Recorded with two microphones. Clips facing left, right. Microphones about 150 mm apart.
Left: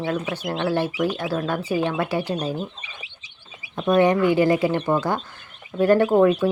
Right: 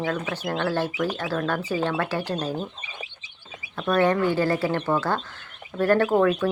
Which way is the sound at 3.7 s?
20° left (ahead or behind).